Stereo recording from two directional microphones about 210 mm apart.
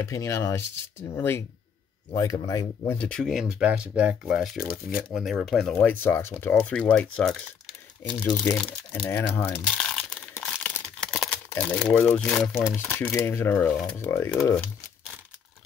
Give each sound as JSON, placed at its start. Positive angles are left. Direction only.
{"t": 0.0, "sound": "speech", "side_deg": 15}
{"t": 3.0, "sound": "speech", "side_deg": 5}
{"t": 8.1, "sound": "speech", "side_deg": 5}
{"t": 13.7, "sound": "speech", "side_deg": 0}
{"t": 13.9, "sound": "speech", "side_deg": 15}